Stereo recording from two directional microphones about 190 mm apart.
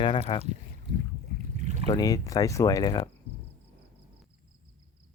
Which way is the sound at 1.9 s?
20° left (ahead or behind).